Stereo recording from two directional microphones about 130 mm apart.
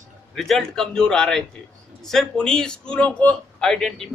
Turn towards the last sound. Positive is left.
turn(degrees=5)  # may be behind; listen again after turning